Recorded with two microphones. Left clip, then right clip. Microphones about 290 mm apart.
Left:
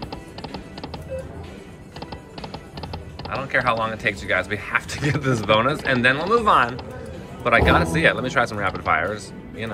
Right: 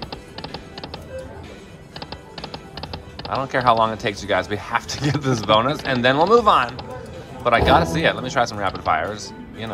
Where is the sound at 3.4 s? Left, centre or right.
Centre.